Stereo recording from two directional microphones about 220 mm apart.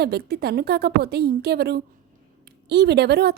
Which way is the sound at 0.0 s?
45° right (ahead or behind).